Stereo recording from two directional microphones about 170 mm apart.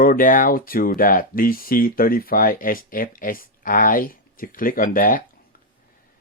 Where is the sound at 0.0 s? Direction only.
55° left (ahead or behind).